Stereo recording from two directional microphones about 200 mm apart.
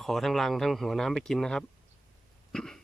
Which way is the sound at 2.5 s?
Centre (ahead or behind).